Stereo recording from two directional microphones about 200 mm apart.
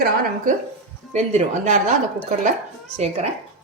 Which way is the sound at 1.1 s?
35° right (ahead or behind).